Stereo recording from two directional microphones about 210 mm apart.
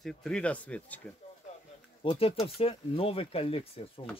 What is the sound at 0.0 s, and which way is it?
Speech, 5° left (ahead or behind).